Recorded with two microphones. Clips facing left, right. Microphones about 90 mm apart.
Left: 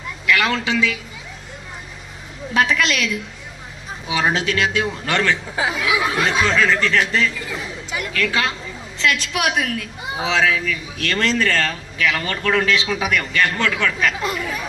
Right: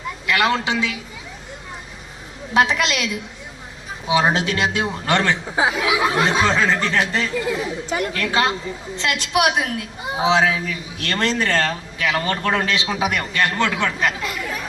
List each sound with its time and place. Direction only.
0.3 s a woman's voice: 25° right (ahead or behind)
2.5 s a woman's voice: 20° right (ahead or behind)
7.9 s a woman's voice: 40° right (ahead or behind)
14.2 s speech: 30° left (ahead or behind)
14.4 s speech: 5° left (ahead or behind)